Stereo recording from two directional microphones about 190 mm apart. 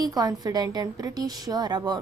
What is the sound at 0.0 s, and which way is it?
Speech, 20° right (ahead or behind).